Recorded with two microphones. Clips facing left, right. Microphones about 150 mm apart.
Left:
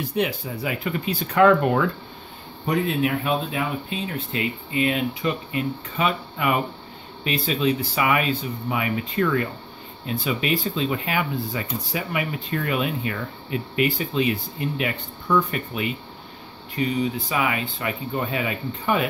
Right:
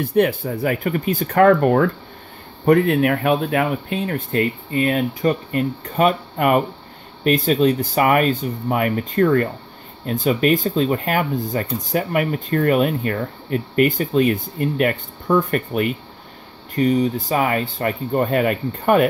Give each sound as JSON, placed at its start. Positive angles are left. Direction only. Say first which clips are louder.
{"t": 0.0, "sound": "speech", "louder": "right 7 dB", "side_deg": -55}
{"t": 2.6, "sound": "speech", "louder": "right 8 dB", "side_deg": -60}